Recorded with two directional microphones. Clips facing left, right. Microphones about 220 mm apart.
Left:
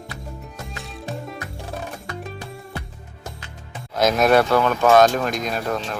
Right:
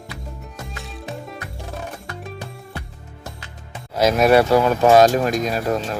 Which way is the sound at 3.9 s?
10° right (ahead or behind).